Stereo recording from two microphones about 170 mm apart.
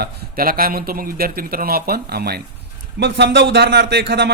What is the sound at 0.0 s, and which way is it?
A man's voice, 60° right (ahead or behind).